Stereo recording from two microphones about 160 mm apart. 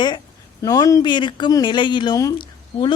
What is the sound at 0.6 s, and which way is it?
A woman's voice, 20° left (ahead or behind).